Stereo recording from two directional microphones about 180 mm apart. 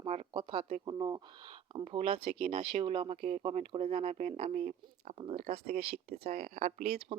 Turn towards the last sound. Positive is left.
turn(degrees=-60)  # may be behind; listen again after turning